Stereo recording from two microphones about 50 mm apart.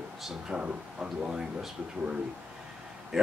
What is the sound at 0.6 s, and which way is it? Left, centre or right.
Speech, right.